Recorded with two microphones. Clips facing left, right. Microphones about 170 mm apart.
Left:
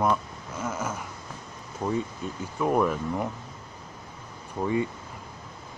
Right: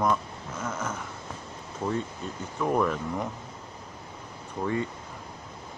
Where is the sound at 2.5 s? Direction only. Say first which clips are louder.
Left 2 dB; 10° left (ahead or behind).